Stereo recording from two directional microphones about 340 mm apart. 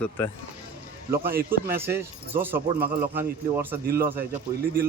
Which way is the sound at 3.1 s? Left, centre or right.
Centre.